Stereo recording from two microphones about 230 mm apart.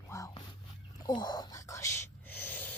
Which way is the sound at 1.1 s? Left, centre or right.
Centre.